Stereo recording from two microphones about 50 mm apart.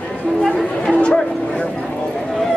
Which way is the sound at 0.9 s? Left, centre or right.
Left.